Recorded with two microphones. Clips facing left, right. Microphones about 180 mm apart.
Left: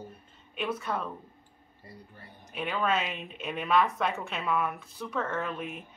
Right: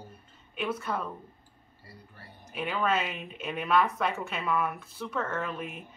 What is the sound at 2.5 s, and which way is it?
Speech, centre (ahead or behind).